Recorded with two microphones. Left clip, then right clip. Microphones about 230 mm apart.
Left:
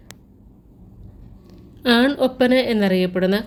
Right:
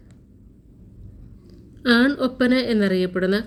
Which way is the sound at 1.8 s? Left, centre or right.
Centre.